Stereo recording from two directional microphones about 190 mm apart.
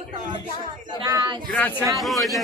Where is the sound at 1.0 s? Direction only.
20° right (ahead or behind).